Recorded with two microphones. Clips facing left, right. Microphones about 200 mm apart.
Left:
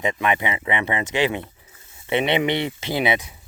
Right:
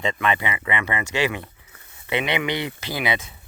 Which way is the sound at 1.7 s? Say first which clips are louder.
Right 1 dB; 60° right (ahead or behind).